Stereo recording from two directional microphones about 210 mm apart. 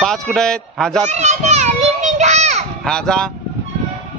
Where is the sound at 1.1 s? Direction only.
30° right (ahead or behind).